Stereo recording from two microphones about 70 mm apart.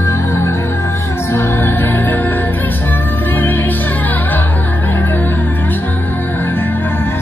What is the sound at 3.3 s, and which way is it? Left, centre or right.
Music, left.